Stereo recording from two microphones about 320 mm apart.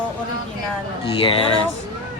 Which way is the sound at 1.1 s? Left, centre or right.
Centre.